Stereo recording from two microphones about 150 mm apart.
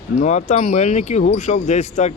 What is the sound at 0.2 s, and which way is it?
Speech, 50° left (ahead or behind).